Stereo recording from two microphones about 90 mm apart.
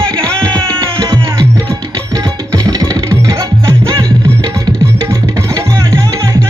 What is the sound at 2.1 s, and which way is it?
Tabla, 40° right (ahead or behind).